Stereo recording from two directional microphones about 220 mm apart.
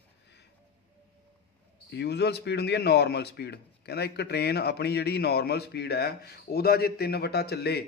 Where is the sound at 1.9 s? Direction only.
50° left (ahead or behind).